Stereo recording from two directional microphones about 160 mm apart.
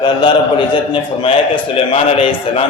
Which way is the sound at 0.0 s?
25° left (ahead or behind).